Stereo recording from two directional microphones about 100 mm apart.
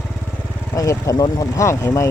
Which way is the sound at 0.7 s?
35° left (ahead or behind).